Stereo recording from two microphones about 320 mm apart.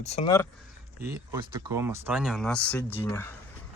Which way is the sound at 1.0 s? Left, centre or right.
Centre.